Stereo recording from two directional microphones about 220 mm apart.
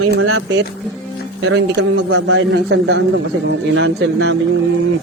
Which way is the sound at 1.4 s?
55° right (ahead or behind).